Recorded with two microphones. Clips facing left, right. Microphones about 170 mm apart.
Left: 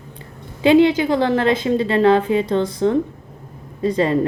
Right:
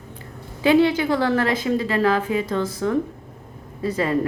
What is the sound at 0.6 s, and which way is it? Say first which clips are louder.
A woman's voice: left 4 dB; 20° left (ahead or behind).